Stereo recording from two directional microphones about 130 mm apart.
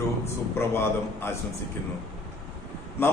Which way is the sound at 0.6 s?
20° left (ahead or behind).